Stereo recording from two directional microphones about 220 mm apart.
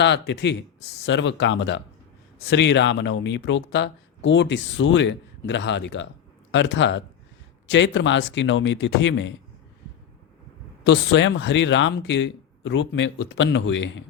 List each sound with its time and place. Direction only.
0.0 s speech: 50° left (ahead or behind)
10.8 s speech: 55° left (ahead or behind)